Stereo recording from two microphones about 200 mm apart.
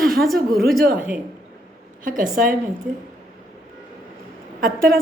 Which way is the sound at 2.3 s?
45° right (ahead or behind).